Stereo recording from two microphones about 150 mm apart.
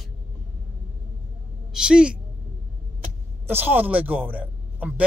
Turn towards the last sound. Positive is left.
turn(degrees=-10)  # may be behind; listen again after turning